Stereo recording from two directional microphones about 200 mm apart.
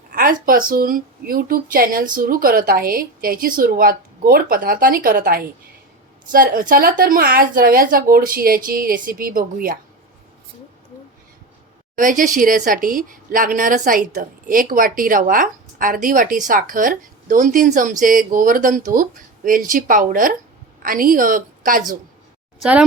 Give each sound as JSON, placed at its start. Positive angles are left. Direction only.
{"t": 0.1, "sound": "a sound", "side_deg": -45}
{"t": 0.7, "sound": "speech", "side_deg": -45}
{"t": 11.9, "sound": "speech", "side_deg": -40}